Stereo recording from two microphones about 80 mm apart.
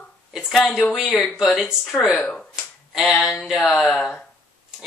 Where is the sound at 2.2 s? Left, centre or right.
Centre.